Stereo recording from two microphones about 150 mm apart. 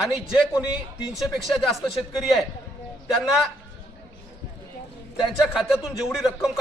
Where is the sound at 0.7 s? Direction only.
Centre (ahead or behind).